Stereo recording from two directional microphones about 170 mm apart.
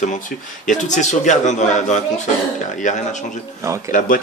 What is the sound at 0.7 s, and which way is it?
A man's voice, 45° left (ahead or behind).